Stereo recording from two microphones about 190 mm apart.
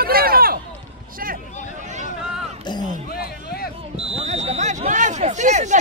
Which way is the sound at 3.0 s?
55° left (ahead or behind).